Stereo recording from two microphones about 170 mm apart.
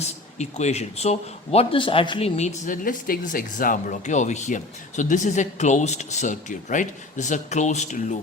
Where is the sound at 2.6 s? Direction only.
55° left (ahead or behind).